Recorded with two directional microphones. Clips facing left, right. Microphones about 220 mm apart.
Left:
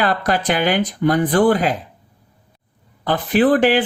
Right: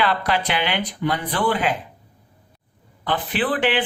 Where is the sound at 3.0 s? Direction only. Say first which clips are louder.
Left 8 dB; 40° left (ahead or behind).